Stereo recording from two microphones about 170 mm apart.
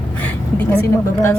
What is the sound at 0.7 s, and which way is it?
Speech, 15° left (ahead or behind).